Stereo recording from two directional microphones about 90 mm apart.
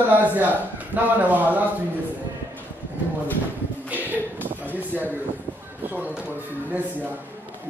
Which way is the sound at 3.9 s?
20° right (ahead or behind).